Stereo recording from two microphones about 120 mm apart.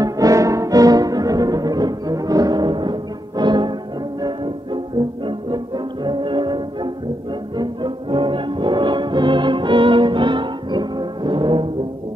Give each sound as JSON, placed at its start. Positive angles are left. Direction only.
{"t": 0.0, "sound": "music", "side_deg": -30}
{"t": 6.0, "sound": "music", "side_deg": -45}